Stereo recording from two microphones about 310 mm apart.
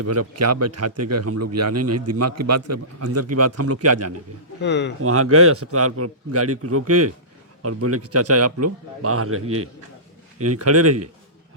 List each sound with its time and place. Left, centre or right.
0.0 s speech: right
4.6 s speech: left
5.0 s speech: right